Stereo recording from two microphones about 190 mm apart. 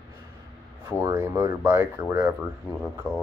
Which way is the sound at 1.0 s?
15° right (ahead or behind).